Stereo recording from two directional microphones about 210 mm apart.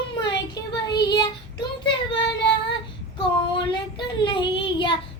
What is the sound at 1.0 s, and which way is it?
Child singing, 20° left (ahead or behind).